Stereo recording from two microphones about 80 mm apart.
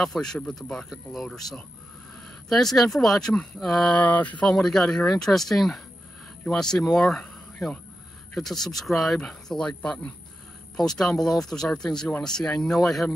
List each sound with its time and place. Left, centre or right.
0.0 s speech: centre
3.9 s a sound: centre
4.6 s speech: centre
8.4 s speech: centre